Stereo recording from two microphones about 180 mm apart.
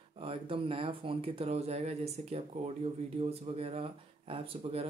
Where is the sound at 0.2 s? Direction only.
30° right (ahead or behind).